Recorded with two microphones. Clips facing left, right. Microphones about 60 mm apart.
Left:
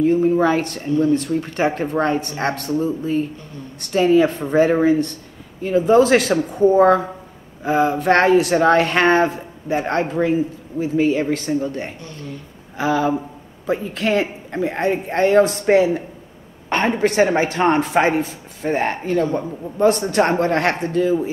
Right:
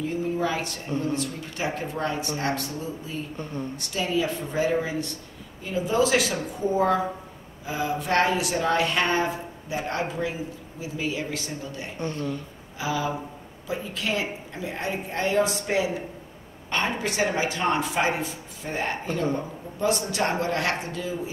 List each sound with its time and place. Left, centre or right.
0.0 s speech: left
12.0 s speech: right
12.7 s speech: left